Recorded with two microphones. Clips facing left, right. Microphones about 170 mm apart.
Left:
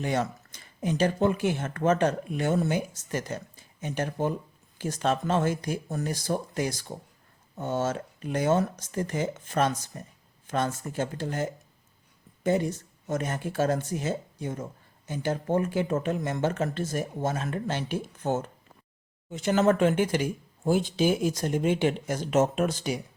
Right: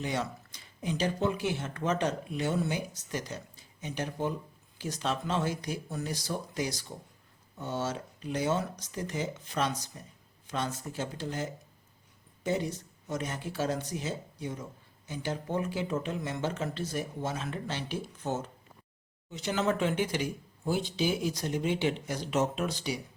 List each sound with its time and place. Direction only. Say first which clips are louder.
0.0 s speech: left 5 dB; 50° left (ahead or behind)